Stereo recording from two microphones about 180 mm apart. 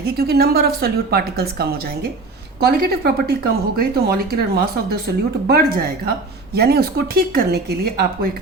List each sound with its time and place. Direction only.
0.0 s speech: 60° right (ahead or behind)